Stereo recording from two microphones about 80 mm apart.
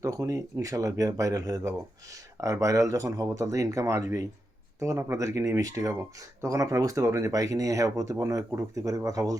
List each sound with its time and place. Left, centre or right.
0.0 s speech: right